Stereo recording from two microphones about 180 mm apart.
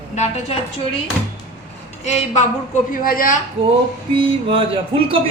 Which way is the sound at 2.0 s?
40° left (ahead or behind).